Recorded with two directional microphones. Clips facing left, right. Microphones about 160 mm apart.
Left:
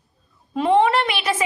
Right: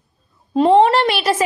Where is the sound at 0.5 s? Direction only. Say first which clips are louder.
Right 5 dB; 30° right (ahead or behind).